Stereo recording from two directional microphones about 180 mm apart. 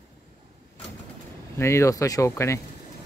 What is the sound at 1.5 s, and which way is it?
Speech, 15° left (ahead or behind).